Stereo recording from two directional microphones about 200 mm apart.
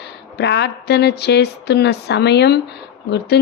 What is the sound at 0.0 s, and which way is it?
Speech, 55° left (ahead or behind).